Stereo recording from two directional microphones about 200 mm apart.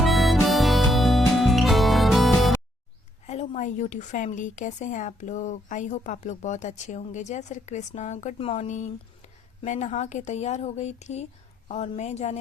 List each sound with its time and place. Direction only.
0.0 s harmonica: centre (ahead or behind)
3.2 s speech: 35° left (ahead or behind)